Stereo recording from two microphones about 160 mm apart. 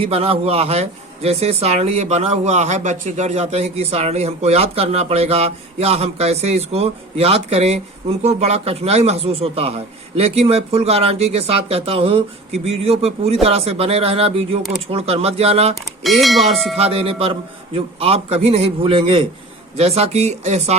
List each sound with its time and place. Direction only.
0.0 s speech: 35° right (ahead or behind)
15.7 s speech: centre (ahead or behind)
16.7 s speech: 40° right (ahead or behind)